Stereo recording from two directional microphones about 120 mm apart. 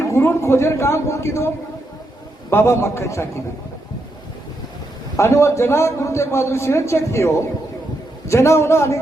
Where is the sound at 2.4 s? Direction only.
25° left (ahead or behind).